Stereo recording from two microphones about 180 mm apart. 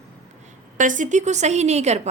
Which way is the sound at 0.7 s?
45° right (ahead or behind).